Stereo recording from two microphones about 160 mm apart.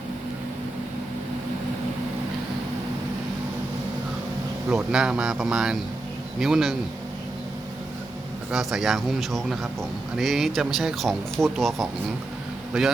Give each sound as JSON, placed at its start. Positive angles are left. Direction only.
{"t": 4.7, "sound": "speech", "side_deg": -5}
{"t": 8.4, "sound": "speech", "side_deg": 0}